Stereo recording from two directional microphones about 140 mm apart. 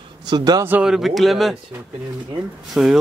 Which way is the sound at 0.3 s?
30° right (ahead or behind).